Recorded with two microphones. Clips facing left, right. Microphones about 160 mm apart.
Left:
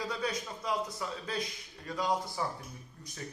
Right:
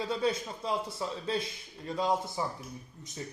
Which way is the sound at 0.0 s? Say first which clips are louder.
Right 5 dB; 25° right (ahead or behind).